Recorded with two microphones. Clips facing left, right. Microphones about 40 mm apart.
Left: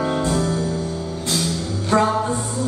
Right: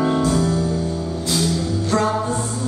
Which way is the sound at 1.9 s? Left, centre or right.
Left.